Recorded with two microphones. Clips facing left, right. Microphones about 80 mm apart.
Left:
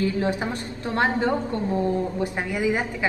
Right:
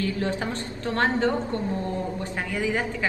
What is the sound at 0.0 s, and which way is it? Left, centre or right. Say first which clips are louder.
A woman's voice: left 3 dB; left.